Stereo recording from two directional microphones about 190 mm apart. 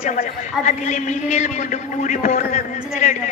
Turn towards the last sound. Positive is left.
turn(degrees=40)  # may be behind; listen again after turning